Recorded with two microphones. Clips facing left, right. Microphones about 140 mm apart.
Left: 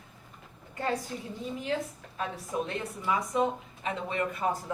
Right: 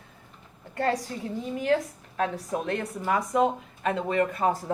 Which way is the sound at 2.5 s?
60° right (ahead or behind).